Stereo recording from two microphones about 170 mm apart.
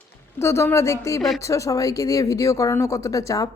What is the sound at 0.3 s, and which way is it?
A woman's voice, 15° left (ahead or behind).